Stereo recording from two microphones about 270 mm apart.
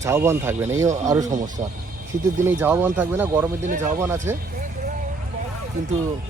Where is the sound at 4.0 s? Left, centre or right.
Centre.